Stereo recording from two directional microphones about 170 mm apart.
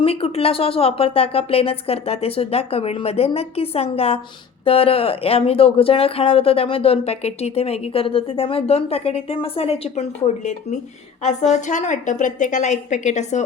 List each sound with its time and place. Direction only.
0.0 s a woman's voice: 35° left (ahead or behind)